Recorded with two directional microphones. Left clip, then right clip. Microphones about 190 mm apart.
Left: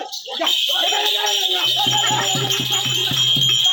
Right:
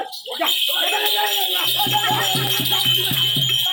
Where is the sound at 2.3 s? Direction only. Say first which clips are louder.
Even; 50° right (ahead or behind).